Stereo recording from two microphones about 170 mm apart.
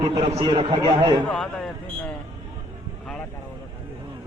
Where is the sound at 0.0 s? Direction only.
35° right (ahead or behind).